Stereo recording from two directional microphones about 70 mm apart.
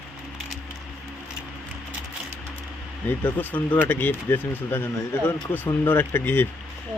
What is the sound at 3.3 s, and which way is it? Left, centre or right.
Speech, left.